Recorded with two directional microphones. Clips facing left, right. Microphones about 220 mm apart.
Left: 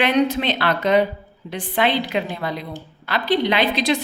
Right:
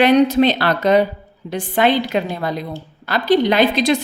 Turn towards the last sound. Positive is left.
turn(degrees=-45)  # may be behind; listen again after turning